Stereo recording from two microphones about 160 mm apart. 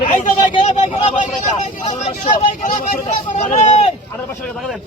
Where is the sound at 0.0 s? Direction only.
50° left (ahead or behind).